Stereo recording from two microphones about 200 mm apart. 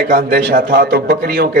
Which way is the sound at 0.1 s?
50° right (ahead or behind).